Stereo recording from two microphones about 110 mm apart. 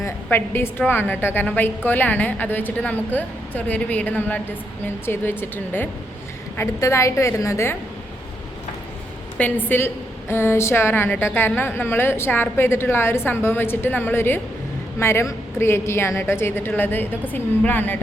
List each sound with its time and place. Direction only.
0.3 s a woman's voice: 20° left (ahead or behind)
9.4 s a woman's voice: 15° left (ahead or behind)